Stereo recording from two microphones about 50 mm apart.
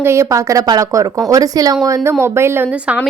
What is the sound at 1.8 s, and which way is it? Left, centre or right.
Speech, right.